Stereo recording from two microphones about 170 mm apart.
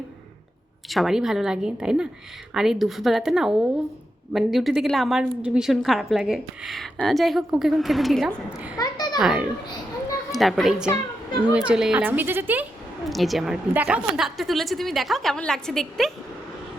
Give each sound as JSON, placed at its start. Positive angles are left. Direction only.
{"t": 0.9, "sound": "a woman's voice", "side_deg": 0}
{"t": 8.8, "sound": "a sound", "side_deg": 25}
{"t": 9.2, "sound": "a woman's voice", "side_deg": -10}
{"t": 10.9, "sound": "a sound", "side_deg": 25}
{"t": 11.5, "sound": "speech", "side_deg": -5}
{"t": 13.1, "sound": "a woman's voice", "side_deg": 0}